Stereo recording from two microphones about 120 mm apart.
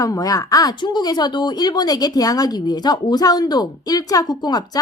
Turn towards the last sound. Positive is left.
turn(degrees=35)  # may be behind; listen again after turning